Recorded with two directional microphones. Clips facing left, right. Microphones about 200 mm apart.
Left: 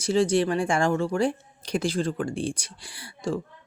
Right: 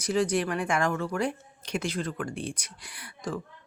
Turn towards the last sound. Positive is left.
turn(degrees=25)  # may be behind; listen again after turning